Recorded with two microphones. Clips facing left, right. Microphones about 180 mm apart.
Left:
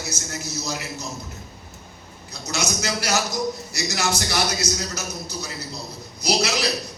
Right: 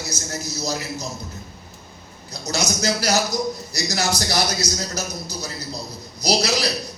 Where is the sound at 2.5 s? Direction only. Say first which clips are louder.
Right 3 dB; 35° right (ahead or behind).